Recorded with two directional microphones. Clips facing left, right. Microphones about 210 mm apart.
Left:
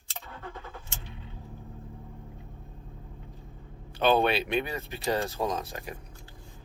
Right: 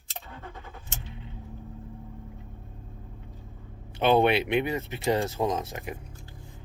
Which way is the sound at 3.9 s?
20° right (ahead or behind).